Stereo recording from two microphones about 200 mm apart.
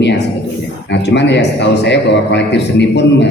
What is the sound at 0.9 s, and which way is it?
A man's voice, 60° left (ahead or behind).